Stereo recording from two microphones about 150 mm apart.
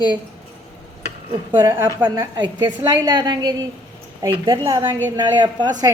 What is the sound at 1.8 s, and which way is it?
Speech, 15° right (ahead or behind).